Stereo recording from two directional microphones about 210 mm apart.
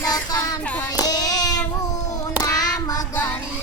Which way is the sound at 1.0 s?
20° left (ahead or behind).